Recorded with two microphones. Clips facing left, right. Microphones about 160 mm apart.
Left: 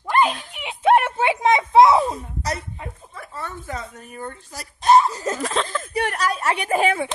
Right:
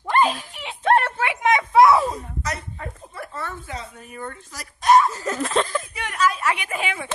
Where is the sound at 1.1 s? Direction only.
30° left (ahead or behind).